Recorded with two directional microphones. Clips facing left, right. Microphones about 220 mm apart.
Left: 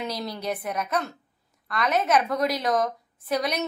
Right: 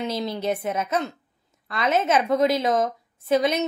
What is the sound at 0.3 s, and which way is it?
Speech, 25° right (ahead or behind).